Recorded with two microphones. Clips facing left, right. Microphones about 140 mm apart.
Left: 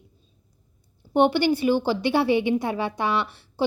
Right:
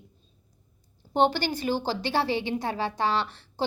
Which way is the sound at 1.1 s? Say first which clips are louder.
Left 5 dB; 15° left (ahead or behind).